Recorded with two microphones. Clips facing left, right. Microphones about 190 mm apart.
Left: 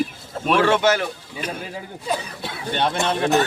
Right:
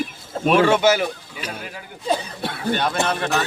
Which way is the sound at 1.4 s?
50° left (ahead or behind).